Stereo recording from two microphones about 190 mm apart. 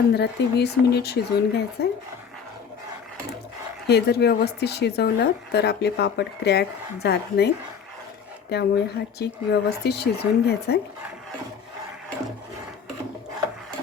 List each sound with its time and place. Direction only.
0.1 s a woman's voice: 60° left (ahead or behind)
3.8 s a woman's voice: 60° left (ahead or behind)